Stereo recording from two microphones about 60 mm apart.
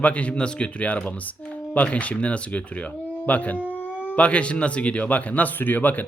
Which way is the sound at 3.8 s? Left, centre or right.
Left.